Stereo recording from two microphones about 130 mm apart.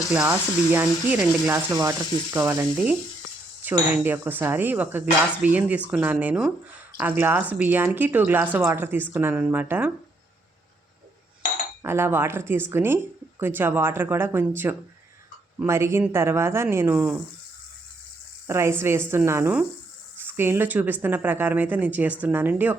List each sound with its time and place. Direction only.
0.1 s speech: 10° right (ahead or behind)
11.8 s speech: 20° right (ahead or behind)
18.4 s speech: 20° right (ahead or behind)